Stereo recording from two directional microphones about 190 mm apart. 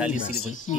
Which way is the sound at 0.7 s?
35° left (ahead or behind).